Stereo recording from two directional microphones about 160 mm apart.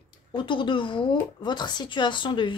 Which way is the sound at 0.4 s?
30° left (ahead or behind).